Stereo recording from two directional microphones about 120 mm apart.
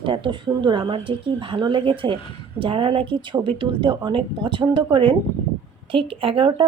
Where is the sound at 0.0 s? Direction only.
45° right (ahead or behind).